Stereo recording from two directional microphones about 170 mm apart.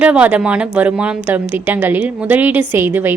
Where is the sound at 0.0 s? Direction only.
10° right (ahead or behind).